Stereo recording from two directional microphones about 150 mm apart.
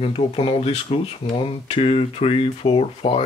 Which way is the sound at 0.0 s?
40° left (ahead or behind).